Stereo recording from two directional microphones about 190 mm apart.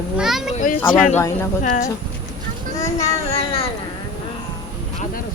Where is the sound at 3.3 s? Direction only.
30° left (ahead or behind).